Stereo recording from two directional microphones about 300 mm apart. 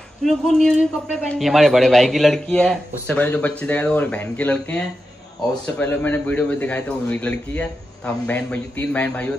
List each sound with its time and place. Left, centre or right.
0.2 s a man's voice: centre